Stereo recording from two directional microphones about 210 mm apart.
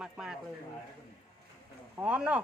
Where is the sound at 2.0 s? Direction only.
5° right (ahead or behind).